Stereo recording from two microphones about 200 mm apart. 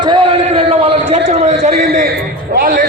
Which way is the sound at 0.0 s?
25° right (ahead or behind).